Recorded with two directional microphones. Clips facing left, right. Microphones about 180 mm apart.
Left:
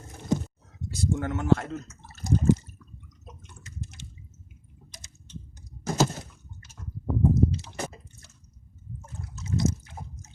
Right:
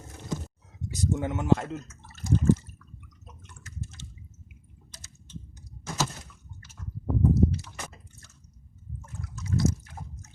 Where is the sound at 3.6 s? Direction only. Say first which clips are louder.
Even; 15° left (ahead or behind).